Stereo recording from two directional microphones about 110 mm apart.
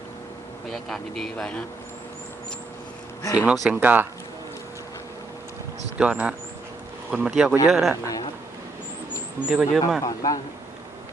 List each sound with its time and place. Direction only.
0.7 s speech: 5° left (ahead or behind)
3.3 s speech: 5° right (ahead or behind)
3.8 s speech: 15° right (ahead or behind)
6.0 s speech: 10° right (ahead or behind)
8.0 s a man's voice: 35° left (ahead or behind)
9.5 s speech: 5° right (ahead or behind)
10.0 s a man's voice: 35° left (ahead or behind)